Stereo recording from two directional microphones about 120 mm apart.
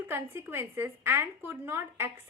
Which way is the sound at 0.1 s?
20° right (ahead or behind).